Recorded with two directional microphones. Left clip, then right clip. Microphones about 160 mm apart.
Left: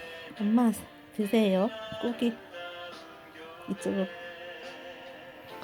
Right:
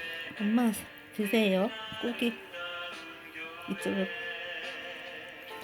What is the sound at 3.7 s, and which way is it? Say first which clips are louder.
Speech: left 2 dB; 15° left (ahead or behind).